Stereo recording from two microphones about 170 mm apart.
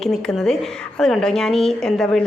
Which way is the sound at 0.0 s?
Centre (ahead or behind).